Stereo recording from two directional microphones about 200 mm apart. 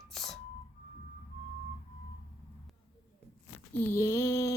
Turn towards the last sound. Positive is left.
turn(degrees=15)  # may be behind; listen again after turning